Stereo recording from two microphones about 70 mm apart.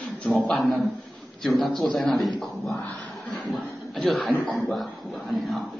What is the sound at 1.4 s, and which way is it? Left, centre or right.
Speech, centre.